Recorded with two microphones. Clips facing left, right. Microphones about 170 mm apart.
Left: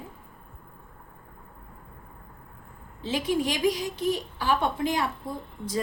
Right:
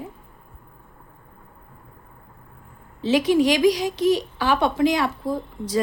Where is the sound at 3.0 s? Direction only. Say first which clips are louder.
Right 9 dB; 80° right.